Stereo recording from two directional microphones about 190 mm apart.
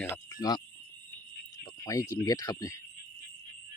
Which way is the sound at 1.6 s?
20° left (ahead or behind).